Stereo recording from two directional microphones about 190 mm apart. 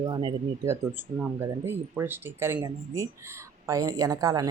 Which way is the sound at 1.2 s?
10° right (ahead or behind).